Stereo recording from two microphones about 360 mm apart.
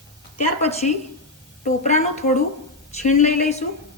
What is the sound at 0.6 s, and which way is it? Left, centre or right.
A woman's voice, centre.